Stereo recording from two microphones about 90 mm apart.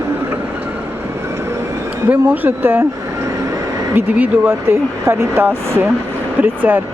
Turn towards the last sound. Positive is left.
turn(degrees=-20)  # may be behind; listen again after turning